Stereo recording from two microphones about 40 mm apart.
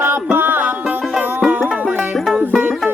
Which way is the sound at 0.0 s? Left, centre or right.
Right.